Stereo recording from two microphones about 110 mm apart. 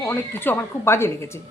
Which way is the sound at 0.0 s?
20° left (ahead or behind).